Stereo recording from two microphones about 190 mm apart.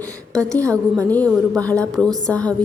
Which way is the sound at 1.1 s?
5° left (ahead or behind).